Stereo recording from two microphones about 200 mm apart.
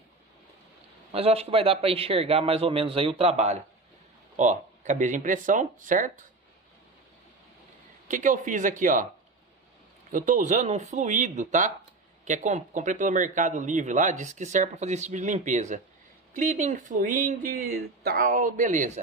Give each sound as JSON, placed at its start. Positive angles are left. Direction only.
{"t": 1.1, "sound": "a man's voice", "side_deg": -30}
{"t": 8.1, "sound": "speech", "side_deg": -40}
{"t": 10.1, "sound": "speech", "side_deg": -40}